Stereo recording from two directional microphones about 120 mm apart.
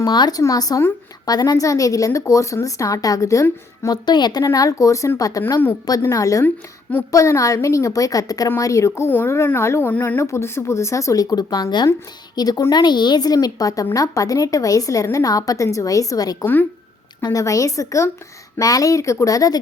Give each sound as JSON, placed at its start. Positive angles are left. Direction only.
{"t": 0.0, "sound": "a woman's voice", "side_deg": 35}
{"t": 16.4, "sound": "speech", "side_deg": 15}
{"t": 17.2, "sound": "a woman's voice", "side_deg": 30}